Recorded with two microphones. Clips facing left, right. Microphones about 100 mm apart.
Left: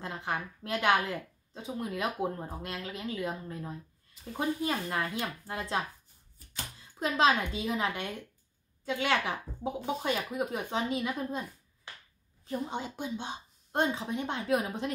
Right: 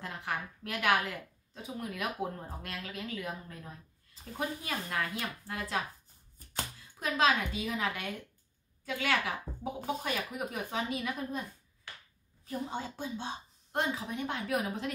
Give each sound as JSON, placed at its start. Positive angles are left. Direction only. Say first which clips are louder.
{"t": 0.0, "sound": "a woman's voice", "louder": "left 2 dB", "side_deg": 25}
{"t": 7.0, "sound": "a woman's voice", "louder": "left 2 dB", "side_deg": 30}